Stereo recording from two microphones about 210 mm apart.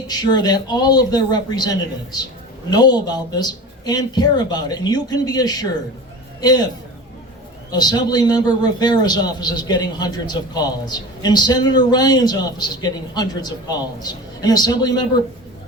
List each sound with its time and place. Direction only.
0.1 s a man's voice: 20° left (ahead or behind)
7.7 s a man's voice: 20° left (ahead or behind)